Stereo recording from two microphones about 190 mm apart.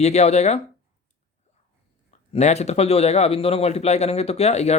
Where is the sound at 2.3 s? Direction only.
35° left (ahead or behind).